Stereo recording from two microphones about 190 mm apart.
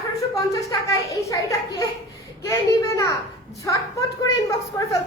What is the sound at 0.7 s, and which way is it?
Speech, 15° left (ahead or behind).